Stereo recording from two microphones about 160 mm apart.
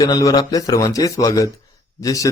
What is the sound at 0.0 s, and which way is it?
A man's voice, 20° left (ahead or behind).